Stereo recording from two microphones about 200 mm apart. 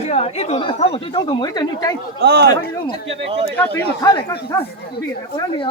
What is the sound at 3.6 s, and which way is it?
Speech, 10° left (ahead or behind).